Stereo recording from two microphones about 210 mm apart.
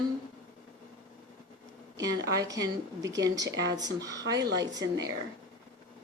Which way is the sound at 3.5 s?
55° right (ahead or behind).